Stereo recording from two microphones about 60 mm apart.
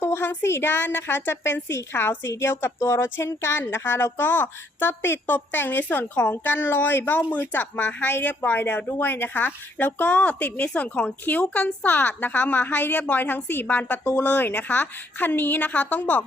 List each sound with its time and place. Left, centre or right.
0.0 s a woman's voice: left